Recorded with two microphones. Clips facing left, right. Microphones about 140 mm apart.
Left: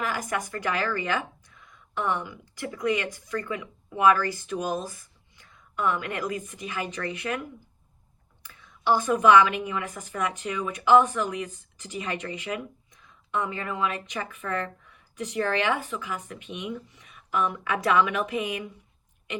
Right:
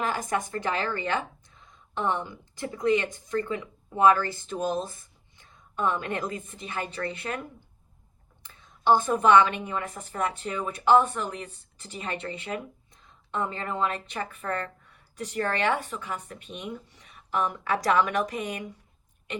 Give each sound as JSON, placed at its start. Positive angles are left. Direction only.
{"t": 0.0, "sound": "a woman's voice", "side_deg": -25}
{"t": 8.4, "sound": "a woman's voice", "side_deg": -25}